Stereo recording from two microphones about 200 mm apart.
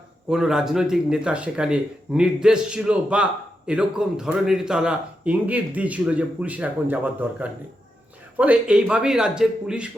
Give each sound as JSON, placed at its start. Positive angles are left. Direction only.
{"t": 0.3, "sound": "a man's voice", "side_deg": 0}